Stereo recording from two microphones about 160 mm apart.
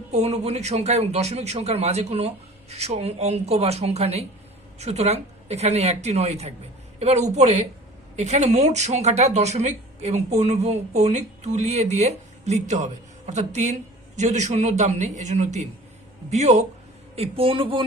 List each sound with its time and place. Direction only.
0.1 s a man's voice: 45° right (ahead or behind)